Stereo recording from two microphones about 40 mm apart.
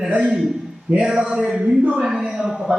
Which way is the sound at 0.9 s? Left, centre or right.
Right.